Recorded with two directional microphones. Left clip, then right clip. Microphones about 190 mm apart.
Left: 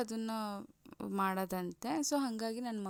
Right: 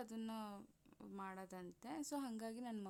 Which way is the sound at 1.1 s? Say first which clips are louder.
Left 17 dB; 40° left (ahead or behind).